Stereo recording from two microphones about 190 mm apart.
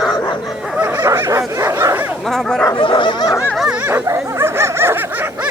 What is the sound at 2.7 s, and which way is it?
Dog, 25° left (ahead or behind).